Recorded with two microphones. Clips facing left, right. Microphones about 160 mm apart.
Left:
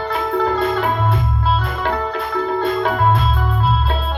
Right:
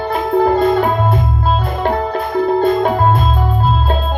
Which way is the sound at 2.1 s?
45° right (ahead or behind).